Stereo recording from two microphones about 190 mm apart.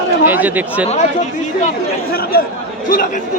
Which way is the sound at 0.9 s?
40° left (ahead or behind).